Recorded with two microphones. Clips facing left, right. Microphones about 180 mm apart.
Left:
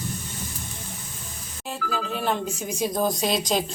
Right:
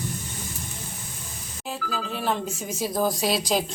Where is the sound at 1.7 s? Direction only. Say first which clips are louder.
Left 2 dB; centre (ahead or behind).